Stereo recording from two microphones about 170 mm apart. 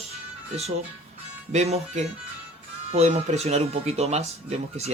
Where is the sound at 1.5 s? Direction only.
40° right (ahead or behind).